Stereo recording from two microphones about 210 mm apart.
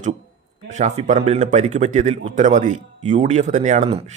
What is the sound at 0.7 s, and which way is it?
A man's voice, 35° right (ahead or behind).